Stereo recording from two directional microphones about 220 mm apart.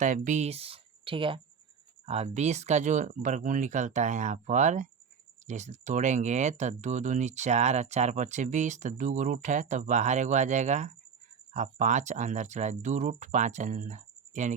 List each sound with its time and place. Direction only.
0.0 s speech: 35° right (ahead or behind)